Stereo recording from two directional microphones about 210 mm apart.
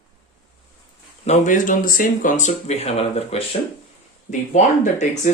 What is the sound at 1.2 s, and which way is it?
Speech, 35° left (ahead or behind).